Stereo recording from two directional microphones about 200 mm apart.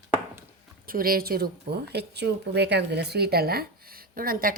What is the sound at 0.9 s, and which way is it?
A woman's voice, 45° right (ahead or behind).